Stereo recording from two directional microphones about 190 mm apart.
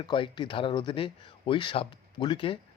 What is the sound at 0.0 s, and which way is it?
Speech, 25° left (ahead or behind).